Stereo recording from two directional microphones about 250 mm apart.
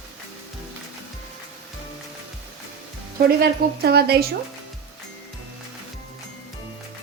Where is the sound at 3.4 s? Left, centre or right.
Right.